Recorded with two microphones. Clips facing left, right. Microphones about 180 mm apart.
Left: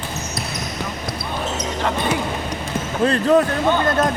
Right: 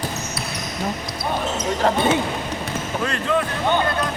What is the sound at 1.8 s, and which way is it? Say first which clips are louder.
Speech: right 4 dB; 25° right (ahead or behind).